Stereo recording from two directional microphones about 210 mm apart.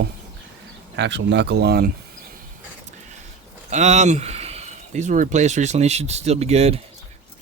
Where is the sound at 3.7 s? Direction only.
35° right (ahead or behind).